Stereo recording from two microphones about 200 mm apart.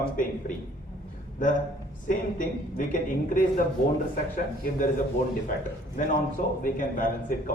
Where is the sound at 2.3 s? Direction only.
40° left (ahead or behind).